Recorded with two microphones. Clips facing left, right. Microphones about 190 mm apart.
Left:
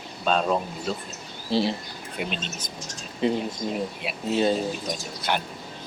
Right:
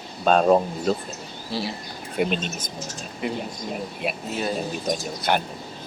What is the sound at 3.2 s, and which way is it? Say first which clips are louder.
Speech: left 5 dB; 25° left (ahead or behind).